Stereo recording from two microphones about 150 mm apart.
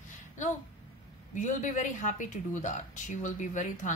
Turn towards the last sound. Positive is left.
turn(degrees=55)  # may be behind; listen again after turning